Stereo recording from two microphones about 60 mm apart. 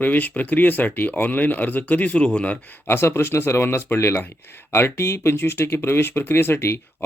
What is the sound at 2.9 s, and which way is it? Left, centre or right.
Speech, left.